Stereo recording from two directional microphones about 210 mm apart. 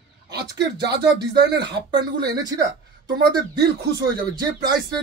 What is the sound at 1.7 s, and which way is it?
Speech, 20° right (ahead or behind).